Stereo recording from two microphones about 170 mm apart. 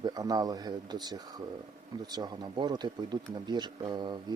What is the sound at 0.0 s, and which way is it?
Speech, 20° right (ahead or behind).